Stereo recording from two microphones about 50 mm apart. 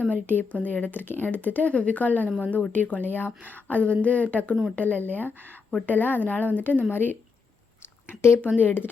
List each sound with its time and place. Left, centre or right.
0.0 s speech: left
3.1 s speech: left
8.5 s speech: left